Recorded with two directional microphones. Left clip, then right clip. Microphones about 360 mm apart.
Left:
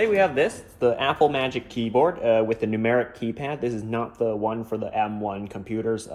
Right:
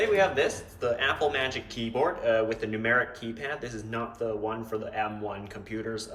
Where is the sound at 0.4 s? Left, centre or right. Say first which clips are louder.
Left 6 dB; centre.